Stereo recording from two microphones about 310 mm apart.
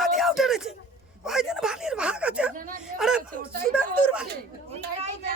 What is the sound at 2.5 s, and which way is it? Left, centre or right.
Speech, right.